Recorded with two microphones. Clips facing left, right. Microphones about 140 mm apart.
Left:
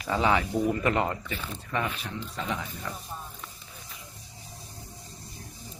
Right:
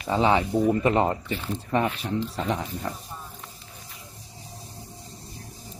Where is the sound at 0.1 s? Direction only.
25° right (ahead or behind).